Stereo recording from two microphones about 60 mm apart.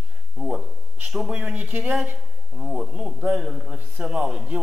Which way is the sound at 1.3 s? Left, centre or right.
Right.